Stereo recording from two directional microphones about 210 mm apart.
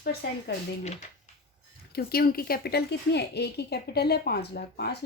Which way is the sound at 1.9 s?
45° left (ahead or behind).